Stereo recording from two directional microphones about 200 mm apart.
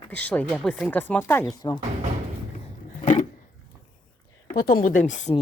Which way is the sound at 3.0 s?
40° left (ahead or behind).